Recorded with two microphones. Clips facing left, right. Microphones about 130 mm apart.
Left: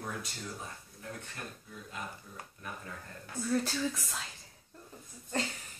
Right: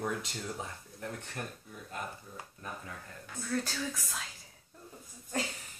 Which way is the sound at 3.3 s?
5° left (ahead or behind).